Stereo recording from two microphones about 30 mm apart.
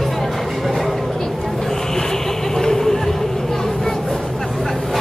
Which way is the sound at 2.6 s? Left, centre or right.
Centre.